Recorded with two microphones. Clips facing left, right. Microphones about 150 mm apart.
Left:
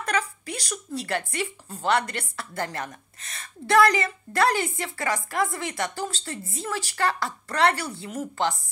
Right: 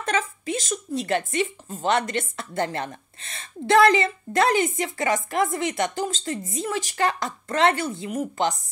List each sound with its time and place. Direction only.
0.0 s speech: 25° right (ahead or behind)